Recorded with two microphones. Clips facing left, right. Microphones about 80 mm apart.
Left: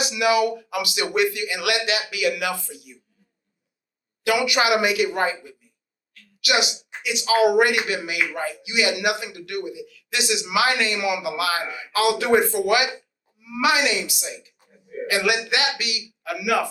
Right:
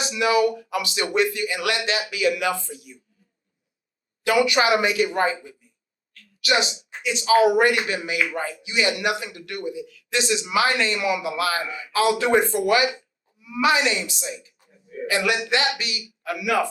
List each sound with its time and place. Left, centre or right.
0.0 s a man's voice: right
4.3 s a man's voice: right